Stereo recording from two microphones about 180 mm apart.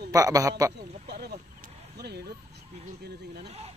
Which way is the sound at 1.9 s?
65° right (ahead or behind).